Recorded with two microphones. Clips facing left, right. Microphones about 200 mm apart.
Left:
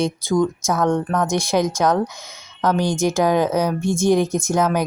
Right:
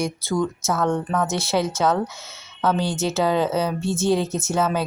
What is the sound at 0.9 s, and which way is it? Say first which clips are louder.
Speech: left 3 dB; 5° right (ahead or behind).